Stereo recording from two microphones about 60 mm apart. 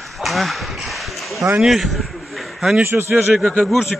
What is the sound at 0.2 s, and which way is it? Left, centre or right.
Speech, centre.